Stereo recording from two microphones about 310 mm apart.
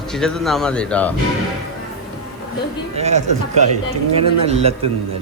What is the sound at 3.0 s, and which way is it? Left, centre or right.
Speech, right.